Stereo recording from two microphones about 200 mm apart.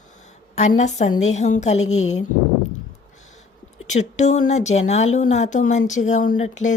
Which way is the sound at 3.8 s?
35° left (ahead or behind).